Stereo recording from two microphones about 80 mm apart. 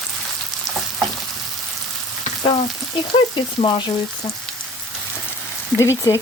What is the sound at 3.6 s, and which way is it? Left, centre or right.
Speech, left.